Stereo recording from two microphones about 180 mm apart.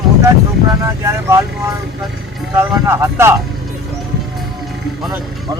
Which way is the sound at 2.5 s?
15° right (ahead or behind).